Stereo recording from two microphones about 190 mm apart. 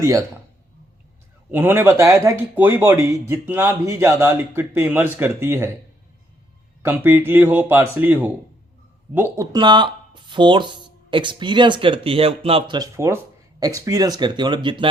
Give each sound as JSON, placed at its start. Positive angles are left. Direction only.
{"t": 0.0, "sound": "speech", "side_deg": -15}
{"t": 1.5, "sound": "speech", "side_deg": -10}
{"t": 6.8, "sound": "speech", "side_deg": -10}